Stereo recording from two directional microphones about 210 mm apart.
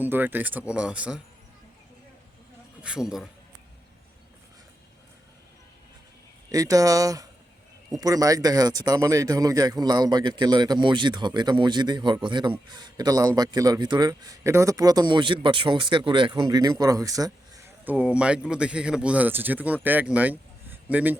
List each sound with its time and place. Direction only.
0.0 s speech: 10° right (ahead or behind)
2.8 s a man's voice: 5° right (ahead or behind)
6.5 s speech: 15° right (ahead or behind)